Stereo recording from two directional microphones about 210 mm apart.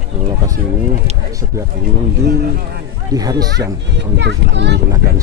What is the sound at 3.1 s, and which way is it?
Speech, 20° right (ahead or behind).